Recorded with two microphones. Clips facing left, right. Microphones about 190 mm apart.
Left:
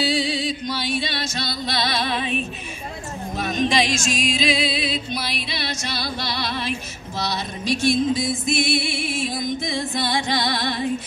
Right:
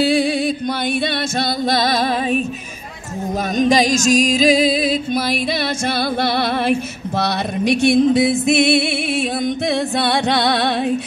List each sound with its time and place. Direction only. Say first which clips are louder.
0.0 s music: right 7 dB; 55° right (ahead or behind)
3.5 s music: right 7 dB; 40° right (ahead or behind); by 10.9 s 70° right (ahead or behind)